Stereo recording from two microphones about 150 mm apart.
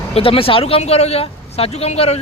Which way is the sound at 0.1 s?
40° left (ahead or behind).